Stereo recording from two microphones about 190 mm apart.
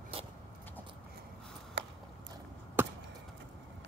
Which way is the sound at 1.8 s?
60° right (ahead or behind).